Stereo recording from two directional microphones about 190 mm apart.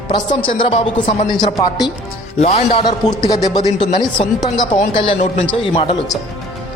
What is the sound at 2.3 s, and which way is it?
A woman's voice, 35° left (ahead or behind).